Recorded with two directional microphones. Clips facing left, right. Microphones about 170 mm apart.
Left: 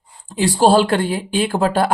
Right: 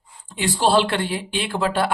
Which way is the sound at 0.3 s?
40° left (ahead or behind).